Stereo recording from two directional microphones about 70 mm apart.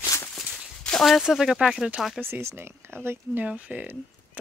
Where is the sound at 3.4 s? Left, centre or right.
Centre.